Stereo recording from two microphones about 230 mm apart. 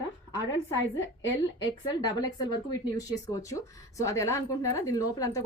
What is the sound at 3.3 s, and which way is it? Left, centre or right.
A woman's voice, centre.